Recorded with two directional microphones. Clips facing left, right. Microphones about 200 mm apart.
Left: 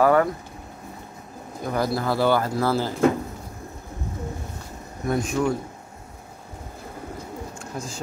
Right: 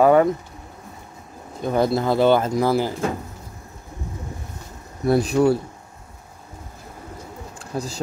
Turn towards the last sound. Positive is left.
turn(degrees=-35)  # may be behind; listen again after turning